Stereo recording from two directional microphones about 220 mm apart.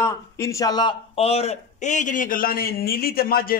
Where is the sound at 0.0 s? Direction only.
15° left (ahead or behind).